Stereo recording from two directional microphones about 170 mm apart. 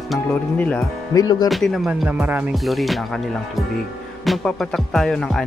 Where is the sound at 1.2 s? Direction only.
25° left (ahead or behind).